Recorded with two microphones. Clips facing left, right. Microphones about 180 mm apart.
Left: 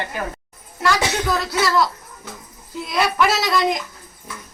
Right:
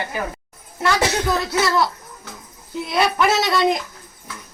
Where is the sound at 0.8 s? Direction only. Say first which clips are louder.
Right 1 dB; 20° right (ahead or behind).